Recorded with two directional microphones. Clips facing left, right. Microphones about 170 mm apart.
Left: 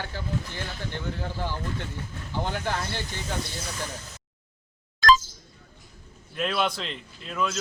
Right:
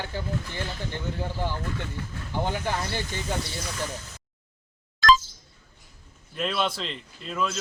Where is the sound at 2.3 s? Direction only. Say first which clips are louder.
Right 1 dB; 15° right (ahead or behind).